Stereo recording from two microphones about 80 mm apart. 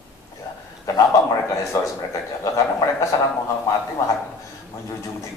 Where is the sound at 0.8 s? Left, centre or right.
Left.